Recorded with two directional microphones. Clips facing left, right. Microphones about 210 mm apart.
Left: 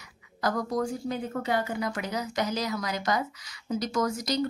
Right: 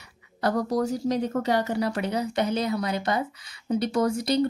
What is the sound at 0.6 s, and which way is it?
Speech, 35° right (ahead or behind).